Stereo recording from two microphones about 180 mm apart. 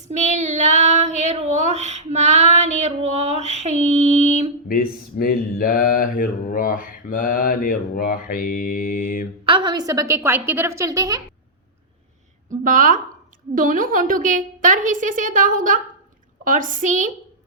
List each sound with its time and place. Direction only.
0.1 s child singing: 40° right (ahead or behind)
2.1 s female singing: 40° right (ahead or behind)
4.7 s speech: 55° left (ahead or behind)
9.5 s a woman's voice: 25° right (ahead or behind)
12.5 s a woman's voice: 50° right (ahead or behind)